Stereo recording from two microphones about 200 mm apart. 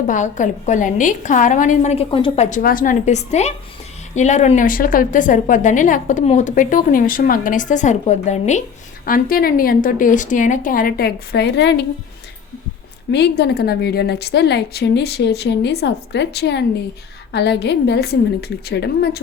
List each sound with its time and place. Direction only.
0.1 s a woman's voice: 40° left (ahead or behind); by 11.9 s 60° left (ahead or behind)
13.1 s a woman's voice: 60° left (ahead or behind)